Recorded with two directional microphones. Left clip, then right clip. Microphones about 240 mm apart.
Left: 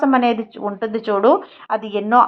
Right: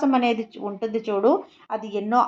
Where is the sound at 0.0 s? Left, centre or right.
Left.